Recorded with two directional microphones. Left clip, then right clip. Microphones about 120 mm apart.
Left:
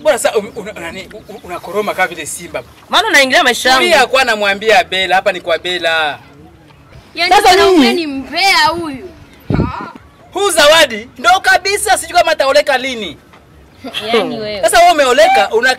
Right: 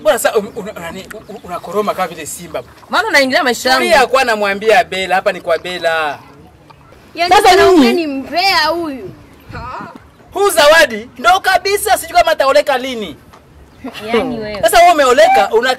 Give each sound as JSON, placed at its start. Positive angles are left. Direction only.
{"t": 0.0, "sound": "speech", "side_deg": 0}
{"t": 3.1, "sound": "speech", "side_deg": 35}
{"t": 3.8, "sound": "speech", "side_deg": 0}
{"t": 7.2, "sound": "speech", "side_deg": -5}
{"t": 9.5, "sound": "a sound", "side_deg": 0}
{"t": 11.3, "sound": "speech", "side_deg": 5}
{"t": 13.8, "sound": "speech", "side_deg": 30}
{"t": 14.6, "sound": "speech", "side_deg": 5}